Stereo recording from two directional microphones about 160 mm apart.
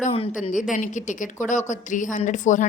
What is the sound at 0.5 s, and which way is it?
A woman's voice, 55° left (ahead or behind).